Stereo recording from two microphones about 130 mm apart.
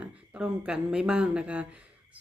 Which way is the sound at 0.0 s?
5° right (ahead or behind).